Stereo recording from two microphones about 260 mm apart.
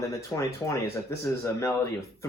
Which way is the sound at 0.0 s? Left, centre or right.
Centre.